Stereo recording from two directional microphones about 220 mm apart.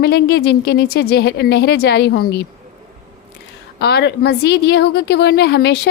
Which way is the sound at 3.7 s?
45° left (ahead or behind).